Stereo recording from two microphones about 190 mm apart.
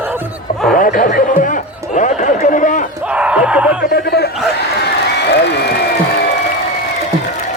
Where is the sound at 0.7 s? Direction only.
45° left (ahead or behind).